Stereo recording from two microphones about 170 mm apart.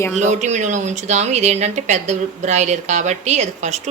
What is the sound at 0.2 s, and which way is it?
A woman's voice, 45° right (ahead or behind).